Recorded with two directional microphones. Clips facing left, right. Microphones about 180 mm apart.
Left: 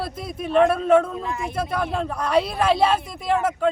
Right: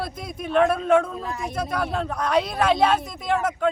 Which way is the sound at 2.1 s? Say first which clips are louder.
Left 2 dB; 5° left (ahead or behind).